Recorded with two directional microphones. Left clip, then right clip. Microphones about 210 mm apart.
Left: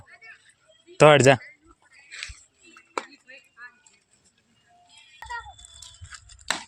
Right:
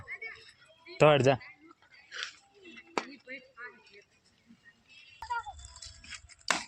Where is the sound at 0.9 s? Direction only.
35° left (ahead or behind).